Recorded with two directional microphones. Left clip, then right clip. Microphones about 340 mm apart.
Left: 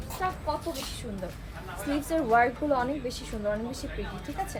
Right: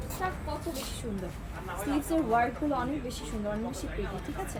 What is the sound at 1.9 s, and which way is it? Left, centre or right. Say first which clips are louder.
Speech: left 4 dB; centre.